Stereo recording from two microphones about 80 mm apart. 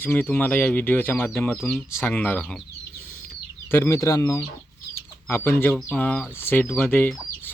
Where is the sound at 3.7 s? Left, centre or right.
Left.